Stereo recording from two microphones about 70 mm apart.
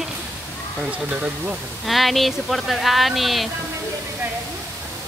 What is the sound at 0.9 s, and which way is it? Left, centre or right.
Speech, centre.